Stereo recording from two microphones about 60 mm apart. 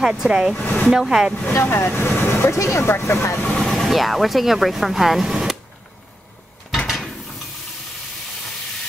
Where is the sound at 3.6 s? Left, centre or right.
Centre.